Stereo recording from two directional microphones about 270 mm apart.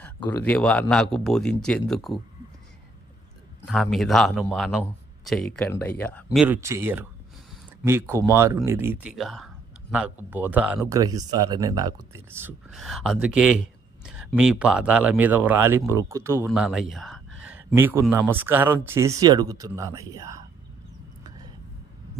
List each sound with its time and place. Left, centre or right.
0.0 s speech: centre
3.7 s speech: centre